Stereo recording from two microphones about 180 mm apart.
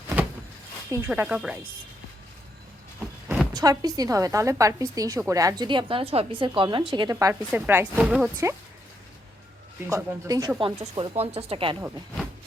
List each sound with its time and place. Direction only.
0.9 s speech: 15° right (ahead or behind)
3.5 s a woman's voice: 20° right (ahead or behind)
9.8 s speech: 15° right (ahead or behind); by 11.8 s 30° right (ahead or behind)